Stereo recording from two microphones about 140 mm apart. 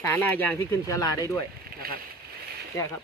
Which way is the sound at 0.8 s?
25° left (ahead or behind).